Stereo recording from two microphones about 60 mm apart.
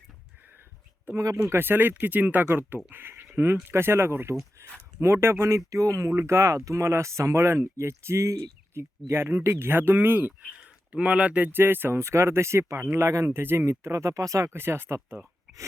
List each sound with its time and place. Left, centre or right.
1.4 s speech: right
4.6 s a sound: right
4.9 s speech: right
10.6 s speech: centre
11.5 s speech: right
13.7 s speech: right
14.5 s speech: right